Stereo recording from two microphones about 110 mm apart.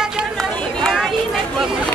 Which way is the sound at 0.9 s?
5° right (ahead or behind).